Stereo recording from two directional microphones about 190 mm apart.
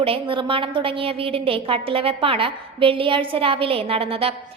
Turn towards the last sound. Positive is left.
turn(degrees=-30)  # may be behind; listen again after turning